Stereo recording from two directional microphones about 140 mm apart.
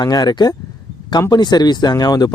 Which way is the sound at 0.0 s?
30° left (ahead or behind).